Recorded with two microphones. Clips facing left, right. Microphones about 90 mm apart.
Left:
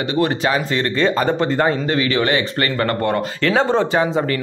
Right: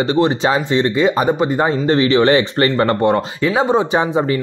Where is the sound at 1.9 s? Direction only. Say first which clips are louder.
Right 5 dB; 30° right (ahead or behind).